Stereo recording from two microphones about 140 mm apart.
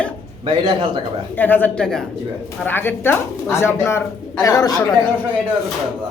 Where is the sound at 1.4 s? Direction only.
10° left (ahead or behind).